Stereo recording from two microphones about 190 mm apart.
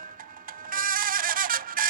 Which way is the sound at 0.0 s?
45° right (ahead or behind).